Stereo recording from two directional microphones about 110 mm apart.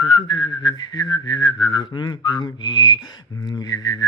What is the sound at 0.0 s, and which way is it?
Whistling, 45° left (ahead or behind).